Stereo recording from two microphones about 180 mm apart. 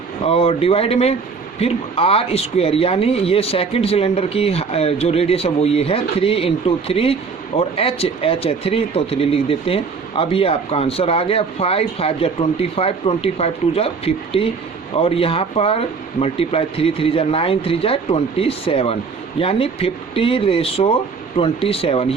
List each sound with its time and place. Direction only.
0.3 s speech: 30° left (ahead or behind)